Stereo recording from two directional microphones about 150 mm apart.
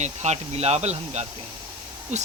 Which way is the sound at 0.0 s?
50° right (ahead or behind).